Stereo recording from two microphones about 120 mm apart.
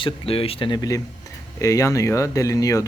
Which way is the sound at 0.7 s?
30° left (ahead or behind).